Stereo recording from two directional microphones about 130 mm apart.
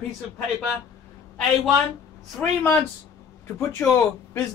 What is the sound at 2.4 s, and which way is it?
Speech, 15° left (ahead or behind).